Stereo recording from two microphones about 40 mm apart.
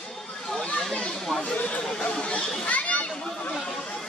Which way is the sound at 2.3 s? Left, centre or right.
Left.